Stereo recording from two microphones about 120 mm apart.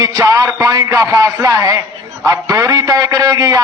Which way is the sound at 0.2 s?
25° right (ahead or behind).